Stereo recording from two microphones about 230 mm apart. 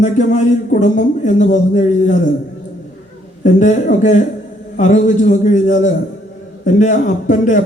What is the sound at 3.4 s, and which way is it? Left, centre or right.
A man's voice, left.